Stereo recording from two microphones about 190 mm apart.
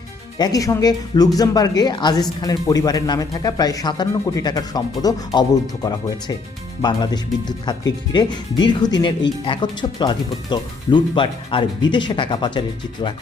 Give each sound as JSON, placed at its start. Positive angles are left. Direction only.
{"t": 0.3, "sound": "speech", "side_deg": 20}